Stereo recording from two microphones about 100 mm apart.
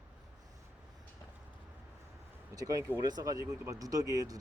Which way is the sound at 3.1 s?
40° right (ahead or behind).